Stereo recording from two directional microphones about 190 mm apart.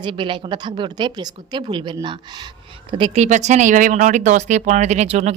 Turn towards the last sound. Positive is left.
turn(degrees=-35)  # may be behind; listen again after turning